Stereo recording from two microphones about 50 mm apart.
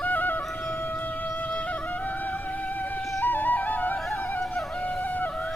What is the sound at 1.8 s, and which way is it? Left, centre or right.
Music, left.